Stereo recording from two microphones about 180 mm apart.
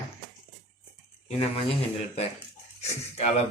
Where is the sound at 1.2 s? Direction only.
35° left (ahead or behind).